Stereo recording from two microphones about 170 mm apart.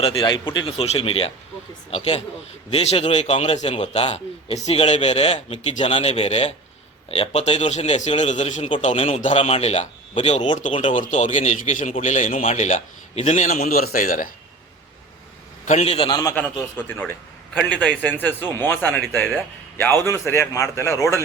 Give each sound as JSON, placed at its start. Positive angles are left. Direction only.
{"t": 0.0, "sound": "a man's voice", "side_deg": 30}
{"t": 15.6, "sound": "speech", "side_deg": 40}
{"t": 16.3, "sound": "a man's voice", "side_deg": 10}